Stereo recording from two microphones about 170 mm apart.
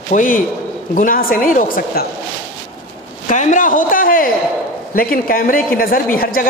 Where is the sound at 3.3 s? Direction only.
50° left (ahead or behind).